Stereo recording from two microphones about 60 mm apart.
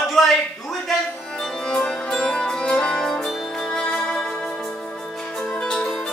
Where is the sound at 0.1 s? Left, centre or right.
Centre.